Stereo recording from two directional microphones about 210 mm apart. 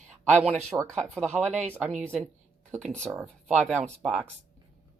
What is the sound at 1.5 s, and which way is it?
Speech, 35° right (ahead or behind).